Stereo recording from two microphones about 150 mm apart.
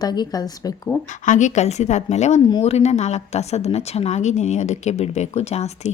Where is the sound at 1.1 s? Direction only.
55° left (ahead or behind).